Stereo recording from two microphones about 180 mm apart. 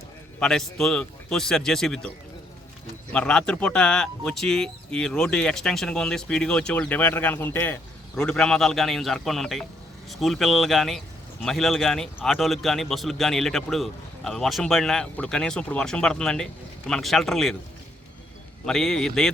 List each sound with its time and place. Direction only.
0.3 s a man's voice: centre (ahead or behind)
3.1 s a man's voice: 5° left (ahead or behind)
18.6 s a man's voice: centre (ahead or behind)